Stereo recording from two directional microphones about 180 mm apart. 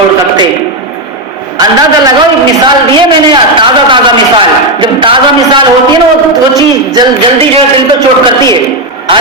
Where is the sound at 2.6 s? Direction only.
25° right (ahead or behind).